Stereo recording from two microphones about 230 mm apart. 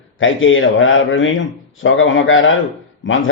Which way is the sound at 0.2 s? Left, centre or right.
Left.